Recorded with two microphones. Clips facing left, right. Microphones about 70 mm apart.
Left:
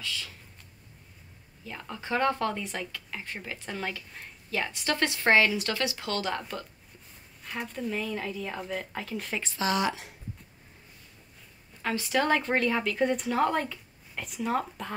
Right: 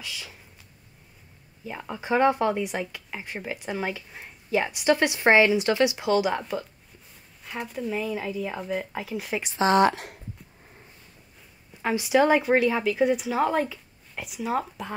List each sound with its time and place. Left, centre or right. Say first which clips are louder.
0.0 s speech: left 1 dB; centre
1.6 s speech: right 5 dB; centre
7.4 s speech: right 3 dB; centre
9.6 s speech: right 8 dB; right
11.8 s speech: right 6 dB; centre